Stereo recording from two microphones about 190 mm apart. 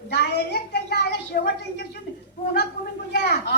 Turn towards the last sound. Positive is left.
turn(degrees=65)  # may be behind; listen again after turning